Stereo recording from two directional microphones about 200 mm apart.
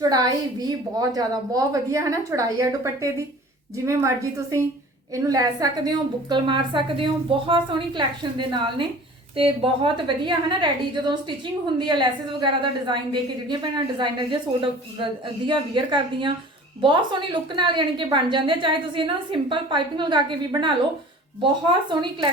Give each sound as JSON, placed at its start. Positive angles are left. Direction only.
{"t": 0.1, "sound": "a woman's voice", "side_deg": -20}
{"t": 13.5, "sound": "a woman's voice", "side_deg": -20}